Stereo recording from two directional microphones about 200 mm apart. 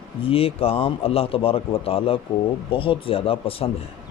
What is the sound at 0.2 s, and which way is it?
Speech, 30° left (ahead or behind).